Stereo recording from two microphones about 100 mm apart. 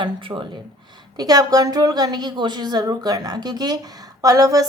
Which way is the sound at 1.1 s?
40° right (ahead or behind).